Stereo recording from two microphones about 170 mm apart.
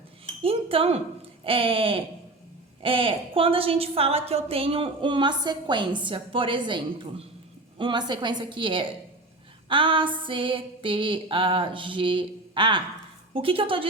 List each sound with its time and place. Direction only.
0.4 s chink: 35° right (ahead or behind)
1.5 s a woman's voice: 30° right (ahead or behind)
7.8 s a sound: 25° right (ahead or behind)
13.3 s a woman's voice: 30° right (ahead or behind)